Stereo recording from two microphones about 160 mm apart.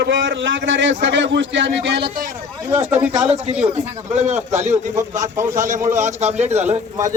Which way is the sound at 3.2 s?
40° right (ahead or behind).